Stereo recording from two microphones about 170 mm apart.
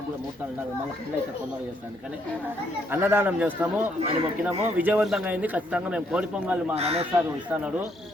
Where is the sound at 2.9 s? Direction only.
10° right (ahead or behind).